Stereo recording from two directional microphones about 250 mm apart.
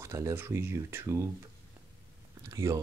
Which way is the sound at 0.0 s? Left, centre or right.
Centre.